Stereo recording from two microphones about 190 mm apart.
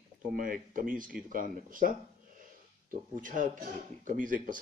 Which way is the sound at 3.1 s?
45° right (ahead or behind).